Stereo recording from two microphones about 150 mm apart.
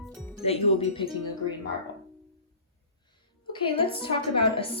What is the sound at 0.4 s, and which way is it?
Speech, 40° left (ahead or behind).